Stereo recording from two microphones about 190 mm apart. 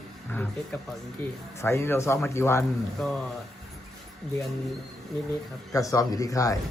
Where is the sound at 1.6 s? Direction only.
15° left (ahead or behind).